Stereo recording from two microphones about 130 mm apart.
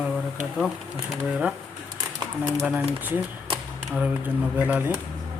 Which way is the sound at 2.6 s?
15° right (ahead or behind).